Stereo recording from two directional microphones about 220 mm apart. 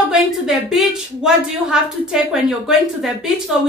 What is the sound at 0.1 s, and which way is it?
Speech, centre (ahead or behind).